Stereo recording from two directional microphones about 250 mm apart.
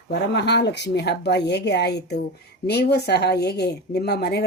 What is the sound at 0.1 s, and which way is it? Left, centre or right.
Speech, left.